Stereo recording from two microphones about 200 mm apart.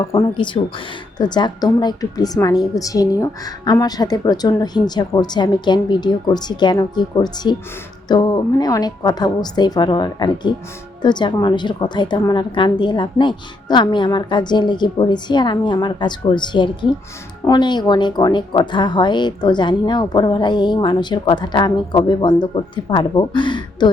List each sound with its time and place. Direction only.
0.2 s speech: 25° left (ahead or behind)